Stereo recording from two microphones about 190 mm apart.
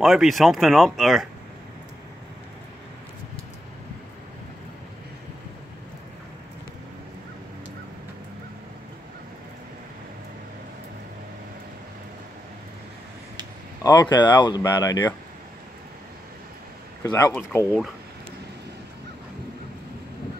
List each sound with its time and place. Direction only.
0.0 s speech: centre (ahead or behind)
13.8 s speech: 20° left (ahead or behind)
17.0 s speech: 20° left (ahead or behind)
17.3 s speech: 5° left (ahead or behind)